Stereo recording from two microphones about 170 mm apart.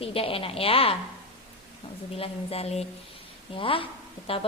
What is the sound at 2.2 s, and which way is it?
A woman's voice, 35° left (ahead or behind).